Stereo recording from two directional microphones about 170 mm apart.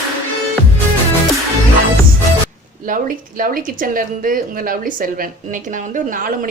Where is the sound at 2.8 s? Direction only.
55° right (ahead or behind).